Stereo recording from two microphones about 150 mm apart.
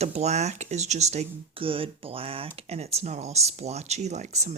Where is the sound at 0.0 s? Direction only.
45° right (ahead or behind).